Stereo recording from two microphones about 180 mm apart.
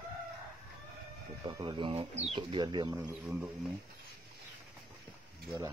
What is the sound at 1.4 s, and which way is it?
Speech, 25° right (ahead or behind).